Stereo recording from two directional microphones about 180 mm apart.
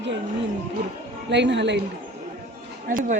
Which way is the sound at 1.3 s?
75° right (ahead or behind).